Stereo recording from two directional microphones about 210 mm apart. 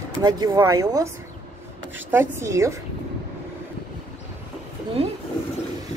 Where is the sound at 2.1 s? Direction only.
15° right (ahead or behind).